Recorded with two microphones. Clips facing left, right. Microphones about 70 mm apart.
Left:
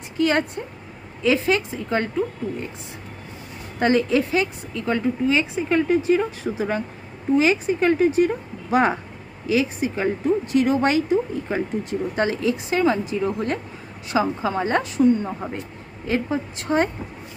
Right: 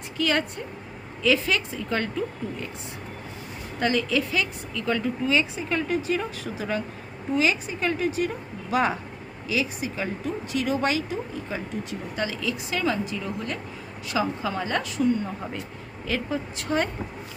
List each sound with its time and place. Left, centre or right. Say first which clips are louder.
0.2 s speech: left 5 dB; left
3.8 s a woman's voice: left 5 dB; left